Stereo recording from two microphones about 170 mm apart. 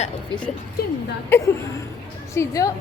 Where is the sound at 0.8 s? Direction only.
65° left (ahead or behind).